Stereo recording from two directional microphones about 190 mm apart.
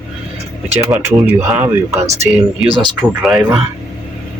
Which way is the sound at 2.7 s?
25° right (ahead or behind).